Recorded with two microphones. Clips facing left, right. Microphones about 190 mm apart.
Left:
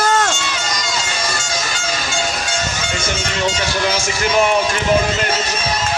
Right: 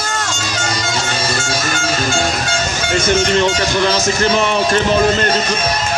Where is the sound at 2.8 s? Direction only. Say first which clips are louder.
Right 8 dB; 55° right (ahead or behind).